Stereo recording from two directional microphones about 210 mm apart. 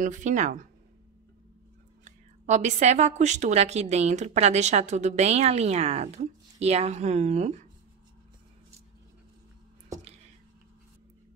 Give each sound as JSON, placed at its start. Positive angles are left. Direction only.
{"t": 0.0, "sound": "a woman's voice", "side_deg": -35}
{"t": 2.0, "sound": "a woman's voice", "side_deg": -35}